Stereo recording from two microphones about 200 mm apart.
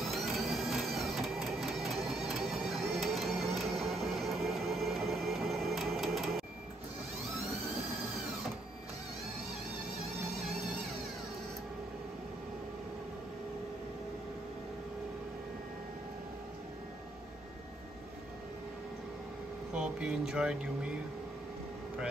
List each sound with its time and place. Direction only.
0.0 s printer: centre (ahead or behind)
19.7 s speech: 5° right (ahead or behind)